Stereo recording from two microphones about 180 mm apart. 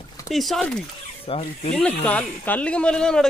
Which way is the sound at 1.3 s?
30° left (ahead or behind).